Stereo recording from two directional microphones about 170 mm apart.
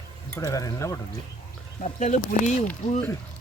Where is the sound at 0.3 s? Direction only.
15° left (ahead or behind).